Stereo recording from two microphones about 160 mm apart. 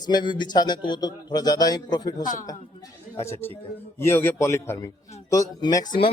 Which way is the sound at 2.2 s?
55° left (ahead or behind).